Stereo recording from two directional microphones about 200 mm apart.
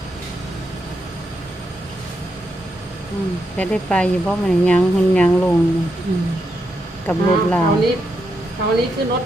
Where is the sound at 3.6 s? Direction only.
5° left (ahead or behind).